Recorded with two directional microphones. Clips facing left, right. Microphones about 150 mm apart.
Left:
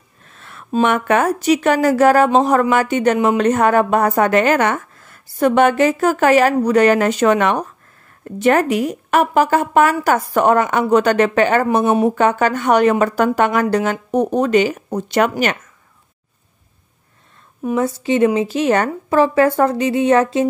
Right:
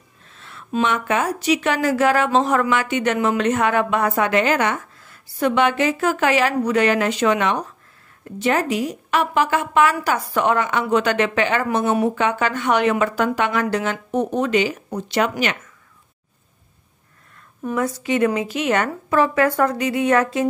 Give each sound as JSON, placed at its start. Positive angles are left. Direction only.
{"t": 0.3, "sound": "a sound", "side_deg": 50}
{"t": 0.8, "sound": "a woman's voice", "side_deg": 55}
{"t": 11.8, "sound": "a woman's voice", "side_deg": 25}
{"t": 12.2, "sound": "a woman's voice", "side_deg": 45}
{"t": 17.7, "sound": "a woman's voice", "side_deg": 30}